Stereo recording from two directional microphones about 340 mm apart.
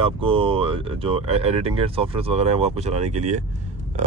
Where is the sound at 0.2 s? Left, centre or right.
Centre.